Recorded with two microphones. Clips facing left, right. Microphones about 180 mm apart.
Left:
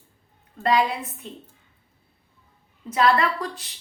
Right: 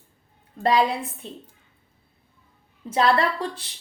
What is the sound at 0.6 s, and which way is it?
Speech, 30° right (ahead or behind).